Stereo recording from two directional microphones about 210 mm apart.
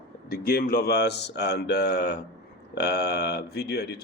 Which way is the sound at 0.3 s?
45° left (ahead or behind).